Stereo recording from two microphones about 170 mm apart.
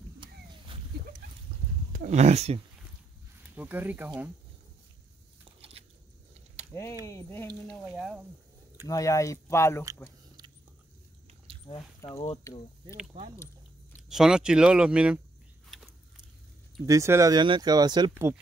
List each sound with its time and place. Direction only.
0.2 s a sound: 30° right (ahead or behind)
1.9 s a sound: 55° right (ahead or behind)
2.1 s speech: 40° right (ahead or behind)
3.5 s speech: 10° right (ahead or behind)
5.4 s biting: 35° right (ahead or behind)
6.7 s speech: 15° left (ahead or behind)
8.8 s speech: 20° left (ahead or behind)
11.7 s speech: 20° left (ahead or behind)
12.0 s speech: 30° left (ahead or behind)
14.0 s speech: 5° right (ahead or behind)
16.8 s speech: 20° right (ahead or behind)